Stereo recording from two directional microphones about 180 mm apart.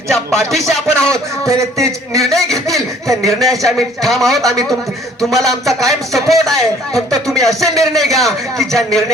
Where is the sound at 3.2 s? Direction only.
Centre (ahead or behind).